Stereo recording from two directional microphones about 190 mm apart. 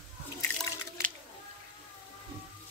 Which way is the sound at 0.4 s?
15° left (ahead or behind).